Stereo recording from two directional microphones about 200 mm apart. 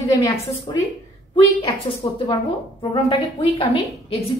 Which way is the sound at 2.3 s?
25° left (ahead or behind).